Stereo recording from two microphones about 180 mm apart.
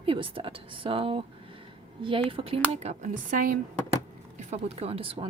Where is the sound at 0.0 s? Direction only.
30° right (ahead or behind); by 3.6 s 45° right (ahead or behind).